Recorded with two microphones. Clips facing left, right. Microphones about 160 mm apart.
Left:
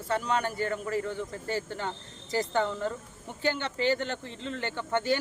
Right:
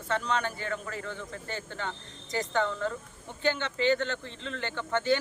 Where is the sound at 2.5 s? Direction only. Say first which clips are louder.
Right 2 dB; 15° left (ahead or behind).